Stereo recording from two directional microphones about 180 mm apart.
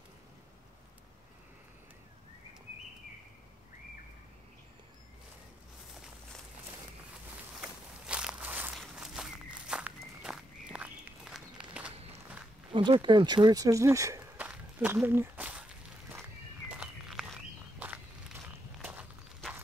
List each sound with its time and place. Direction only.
7.6 s walk: 5° right (ahead or behind)
12.7 s speech: 25° right (ahead or behind); by 15.6 s 10° right (ahead or behind)
16.6 s walk: 5° right (ahead or behind)